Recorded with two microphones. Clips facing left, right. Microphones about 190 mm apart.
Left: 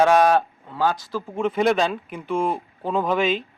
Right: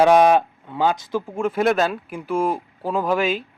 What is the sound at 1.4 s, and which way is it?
Speech, centre (ahead or behind).